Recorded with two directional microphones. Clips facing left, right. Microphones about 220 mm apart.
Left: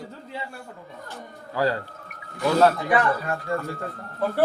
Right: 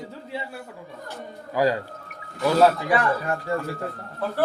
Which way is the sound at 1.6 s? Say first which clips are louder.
Right 2 dB; 15° right (ahead or behind).